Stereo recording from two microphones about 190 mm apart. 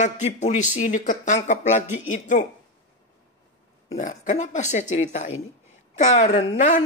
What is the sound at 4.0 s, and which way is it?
Speech, 40° left (ahead or behind).